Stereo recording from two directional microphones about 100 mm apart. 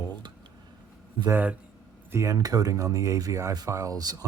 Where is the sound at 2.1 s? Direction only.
30° right (ahead or behind).